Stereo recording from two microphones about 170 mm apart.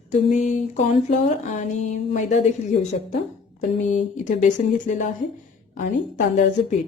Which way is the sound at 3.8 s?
45° left (ahead or behind).